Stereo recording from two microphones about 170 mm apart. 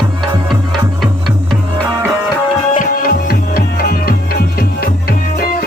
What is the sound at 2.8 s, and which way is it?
Music, 60° left (ahead or behind).